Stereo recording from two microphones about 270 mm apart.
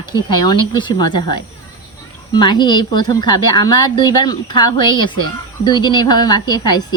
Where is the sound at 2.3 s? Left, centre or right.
Centre.